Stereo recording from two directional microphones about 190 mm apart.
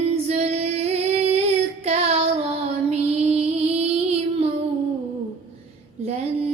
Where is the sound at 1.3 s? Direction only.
30° right (ahead or behind).